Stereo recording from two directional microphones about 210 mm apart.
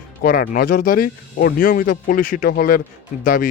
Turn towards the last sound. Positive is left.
turn(degrees=40)  # may be behind; listen again after turning